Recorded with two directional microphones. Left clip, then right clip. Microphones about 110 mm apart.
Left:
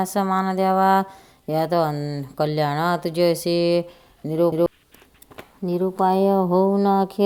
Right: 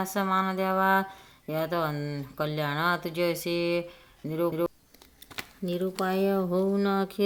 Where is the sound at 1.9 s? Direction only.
15° left (ahead or behind).